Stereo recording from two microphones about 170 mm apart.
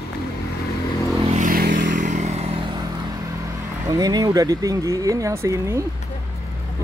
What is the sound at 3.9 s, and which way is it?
Speech, 20° right (ahead or behind).